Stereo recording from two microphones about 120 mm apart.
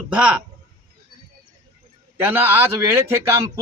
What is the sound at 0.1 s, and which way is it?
Speech, 10° right (ahead or behind).